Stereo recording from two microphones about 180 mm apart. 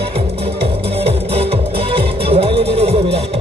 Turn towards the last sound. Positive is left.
turn(degrees=-35)  # may be behind; listen again after turning